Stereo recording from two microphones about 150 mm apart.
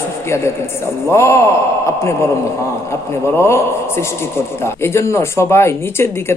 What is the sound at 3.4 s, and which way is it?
Speech, 15° left (ahead or behind).